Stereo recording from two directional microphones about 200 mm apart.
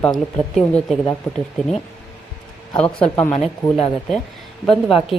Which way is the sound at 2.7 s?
5° left (ahead or behind).